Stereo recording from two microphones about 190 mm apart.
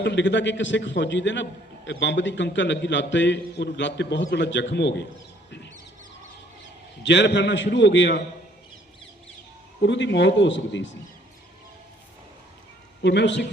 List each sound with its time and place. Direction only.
0.0 s a man's voice: 70° left (ahead or behind)
7.0 s a man's voice: 70° left (ahead or behind)
9.8 s a man's voice: 70° left (ahead or behind)
13.0 s a man's voice: 65° left (ahead or behind)